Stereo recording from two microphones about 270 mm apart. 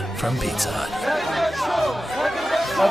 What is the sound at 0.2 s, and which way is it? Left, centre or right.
Music, centre.